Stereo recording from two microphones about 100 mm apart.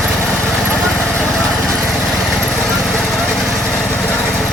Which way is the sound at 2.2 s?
Centre (ahead or behind).